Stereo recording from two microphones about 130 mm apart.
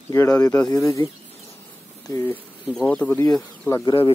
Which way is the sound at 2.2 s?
15° left (ahead or behind).